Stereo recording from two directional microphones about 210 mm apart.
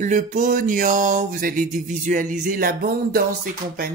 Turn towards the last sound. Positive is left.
turn(degrees=-45)  # may be behind; listen again after turning